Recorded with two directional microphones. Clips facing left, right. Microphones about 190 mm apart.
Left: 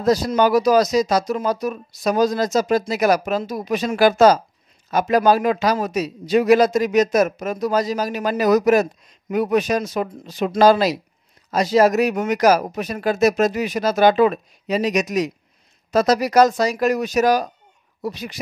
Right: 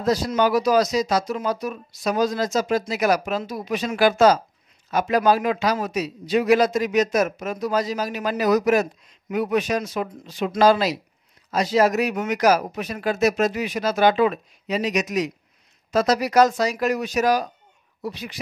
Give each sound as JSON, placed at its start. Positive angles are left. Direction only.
{"t": 0.0, "sound": "a man's voice", "side_deg": 40}